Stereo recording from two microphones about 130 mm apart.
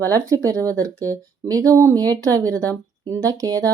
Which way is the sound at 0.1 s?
25° right (ahead or behind).